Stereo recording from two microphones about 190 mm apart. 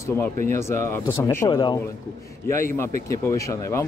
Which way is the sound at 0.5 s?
15° left (ahead or behind).